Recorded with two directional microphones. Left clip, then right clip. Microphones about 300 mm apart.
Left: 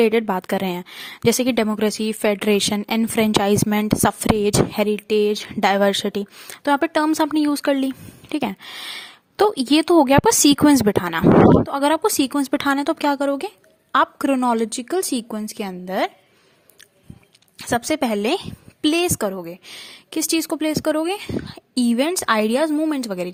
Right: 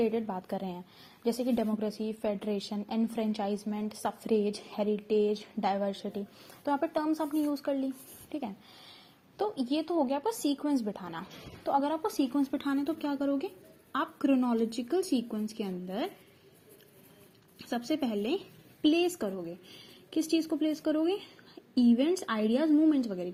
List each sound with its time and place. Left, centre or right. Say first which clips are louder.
0.0 s a woman's voice: left 13 dB; left
17.6 s a woman's voice: left 12 dB; left